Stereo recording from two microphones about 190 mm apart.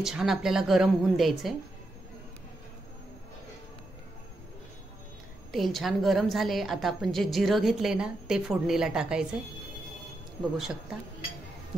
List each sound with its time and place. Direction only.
0.0 s a woman's voice: centre (ahead or behind)
5.5 s a woman's voice: centre (ahead or behind)